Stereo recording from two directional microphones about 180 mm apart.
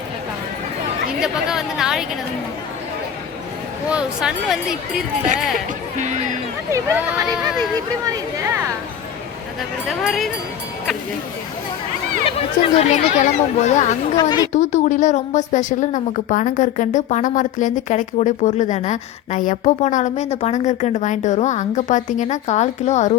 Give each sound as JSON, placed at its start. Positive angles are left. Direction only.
{"t": 1.2, "sound": "speech", "side_deg": -5}
{"t": 3.8, "sound": "speech", "side_deg": -5}
{"t": 6.7, "sound": "speech", "side_deg": -20}
{"t": 10.0, "sound": "speech", "side_deg": 0}
{"t": 12.4, "sound": "speech", "side_deg": 35}
{"t": 14.2, "sound": "a woman's voice", "side_deg": 25}
{"t": 14.5, "sound": "a woman's voice", "side_deg": 40}